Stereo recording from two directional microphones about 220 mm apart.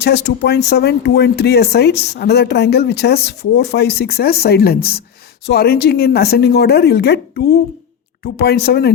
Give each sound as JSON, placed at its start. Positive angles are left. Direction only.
{"t": 0.0, "sound": "speech", "side_deg": 50}